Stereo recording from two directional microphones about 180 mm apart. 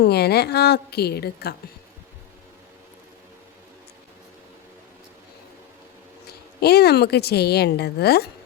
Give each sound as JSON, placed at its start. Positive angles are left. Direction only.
{"t": 0.0, "sound": "a woman's voice", "side_deg": 65}
{"t": 6.2, "sound": "a woman's voice", "side_deg": 60}